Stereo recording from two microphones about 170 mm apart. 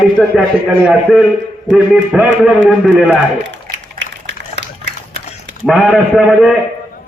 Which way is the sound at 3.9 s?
90° right.